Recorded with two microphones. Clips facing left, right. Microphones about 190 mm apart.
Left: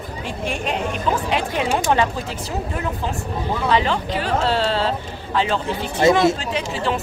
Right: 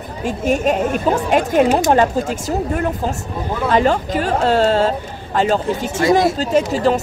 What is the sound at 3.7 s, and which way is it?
A woman's voice, 45° right (ahead or behind).